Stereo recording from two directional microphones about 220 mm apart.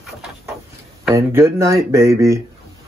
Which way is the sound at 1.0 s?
10° right (ahead or behind).